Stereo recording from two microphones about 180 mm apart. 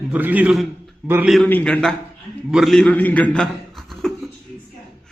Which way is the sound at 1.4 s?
10° left (ahead or behind).